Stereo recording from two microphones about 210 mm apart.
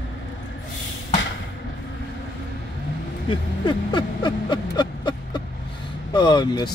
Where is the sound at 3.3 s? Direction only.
20° left (ahead or behind).